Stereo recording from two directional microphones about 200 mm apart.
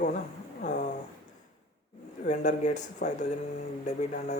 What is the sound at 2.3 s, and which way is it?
A man's voice, 35° left (ahead or behind).